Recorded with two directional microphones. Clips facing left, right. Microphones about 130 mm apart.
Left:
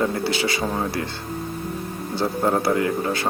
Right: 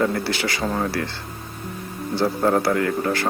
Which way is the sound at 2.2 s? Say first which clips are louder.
Right 2 dB; 20° left (ahead or behind).